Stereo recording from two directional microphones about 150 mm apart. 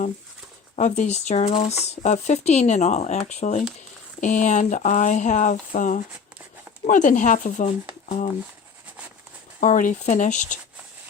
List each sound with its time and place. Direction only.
0.8 s speech: 55° left (ahead or behind)
9.6 s speech: 60° left (ahead or behind)